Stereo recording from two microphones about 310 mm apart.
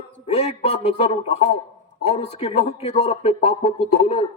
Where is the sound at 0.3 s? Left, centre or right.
Left.